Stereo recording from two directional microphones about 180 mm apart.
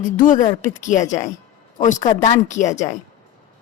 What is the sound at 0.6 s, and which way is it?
A woman's voice, 45° left (ahead or behind).